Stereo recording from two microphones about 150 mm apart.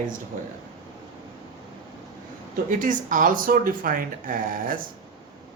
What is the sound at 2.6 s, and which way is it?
A man's voice, 60° right (ahead or behind).